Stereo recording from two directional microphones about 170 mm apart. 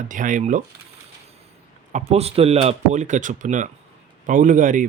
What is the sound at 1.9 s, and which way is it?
A man's voice, 40° right (ahead or behind).